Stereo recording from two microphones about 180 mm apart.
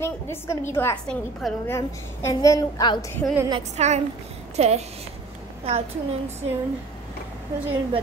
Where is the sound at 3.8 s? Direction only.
40° right (ahead or behind).